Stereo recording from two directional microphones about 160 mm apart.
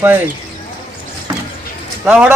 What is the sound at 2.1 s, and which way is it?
Speech, 10° right (ahead or behind).